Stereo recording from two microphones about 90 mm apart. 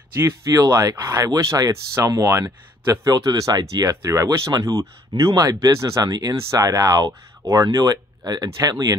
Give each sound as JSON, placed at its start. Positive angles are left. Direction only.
{"t": 0.7, "sound": "speech", "side_deg": -35}
{"t": 3.9, "sound": "speech", "side_deg": -35}